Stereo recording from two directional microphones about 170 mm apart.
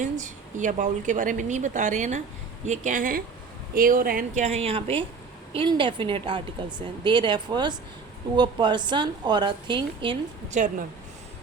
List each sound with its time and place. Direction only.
0.0 s a woman's voice: 50° right (ahead or behind)
4.4 s a woman's voice: 35° right (ahead or behind)
10.5 s a woman's voice: 50° right (ahead or behind)